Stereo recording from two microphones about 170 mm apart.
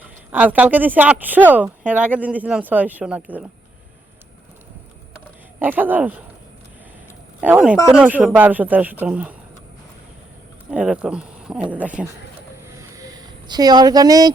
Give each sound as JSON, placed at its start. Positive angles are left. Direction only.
{"t": 0.0, "sound": "speech", "side_deg": -10}
{"t": 5.5, "sound": "speech", "side_deg": -10}
{"t": 7.4, "sound": "speech", "side_deg": -5}
{"t": 10.7, "sound": "speech", "side_deg": -5}
{"t": 12.6, "sound": "a sound", "side_deg": -15}